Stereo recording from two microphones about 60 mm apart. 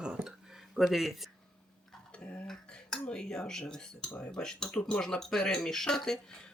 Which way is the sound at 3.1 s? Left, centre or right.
Centre.